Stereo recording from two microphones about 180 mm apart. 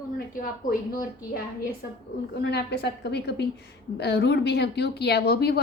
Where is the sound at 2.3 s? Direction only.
65° left (ahead or behind).